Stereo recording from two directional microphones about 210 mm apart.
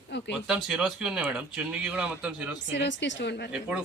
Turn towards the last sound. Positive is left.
turn(degrees=55)  # may be behind; listen again after turning